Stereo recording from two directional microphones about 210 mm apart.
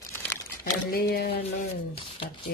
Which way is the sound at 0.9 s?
50° left (ahead or behind).